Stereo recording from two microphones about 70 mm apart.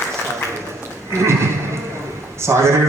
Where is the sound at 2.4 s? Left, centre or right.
Right.